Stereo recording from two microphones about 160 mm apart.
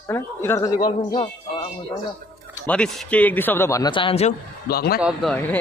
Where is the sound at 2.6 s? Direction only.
5° left (ahead or behind).